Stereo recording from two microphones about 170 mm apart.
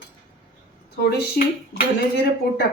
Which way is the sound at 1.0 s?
70° left (ahead or behind).